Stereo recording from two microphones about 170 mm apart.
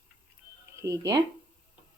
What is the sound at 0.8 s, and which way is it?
Speech, 20° right (ahead or behind).